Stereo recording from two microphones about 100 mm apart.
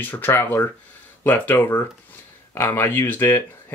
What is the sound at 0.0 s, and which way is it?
Speech, 20° left (ahead or behind).